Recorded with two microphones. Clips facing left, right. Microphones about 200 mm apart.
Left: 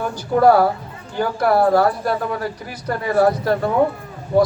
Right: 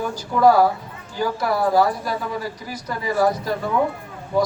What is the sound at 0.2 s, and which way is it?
Speech, 60° left (ahead or behind).